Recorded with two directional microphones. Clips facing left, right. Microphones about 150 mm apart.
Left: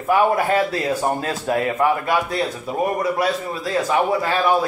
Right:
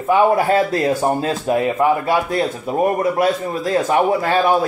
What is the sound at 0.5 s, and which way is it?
Speech, 40° right (ahead or behind).